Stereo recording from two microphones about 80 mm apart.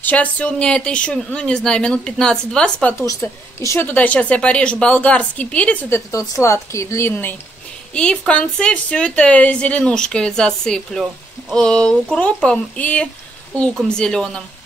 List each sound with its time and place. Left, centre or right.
0.0 s a woman's voice: centre
3.0 s speech: left
3.9 s a woman's voice: centre
5.9 s speech: left
7.1 s speech: left
7.9 s a woman's voice: centre